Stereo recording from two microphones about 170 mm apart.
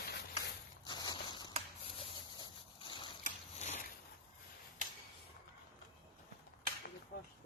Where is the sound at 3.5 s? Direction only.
40° left (ahead or behind).